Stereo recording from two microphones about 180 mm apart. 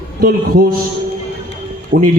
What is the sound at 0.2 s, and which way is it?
Speech, 55° right (ahead or behind).